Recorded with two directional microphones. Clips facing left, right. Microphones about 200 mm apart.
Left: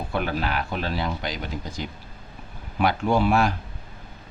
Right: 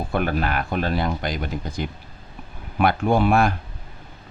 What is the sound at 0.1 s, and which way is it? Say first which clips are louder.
Speech: right 3 dB; 50° right (ahead or behind).